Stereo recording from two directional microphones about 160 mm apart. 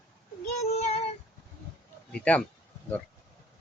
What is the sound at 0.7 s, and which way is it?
Child singing, 40° left (ahead or behind).